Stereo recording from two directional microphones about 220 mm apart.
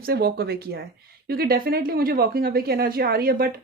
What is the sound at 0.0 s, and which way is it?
Speech, 45° right (ahead or behind).